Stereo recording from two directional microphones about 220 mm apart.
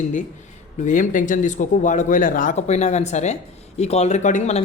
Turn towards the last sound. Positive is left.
turn(degrees=30)  # may be behind; listen again after turning